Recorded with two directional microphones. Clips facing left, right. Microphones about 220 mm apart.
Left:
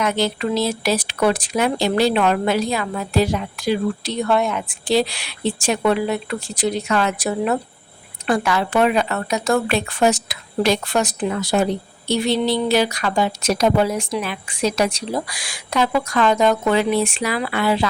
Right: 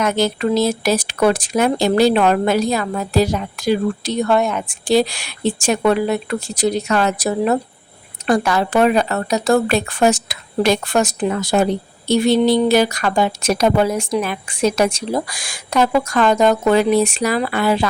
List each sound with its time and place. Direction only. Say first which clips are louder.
0.0 s speech: right 3 dB; 45° right (ahead or behind)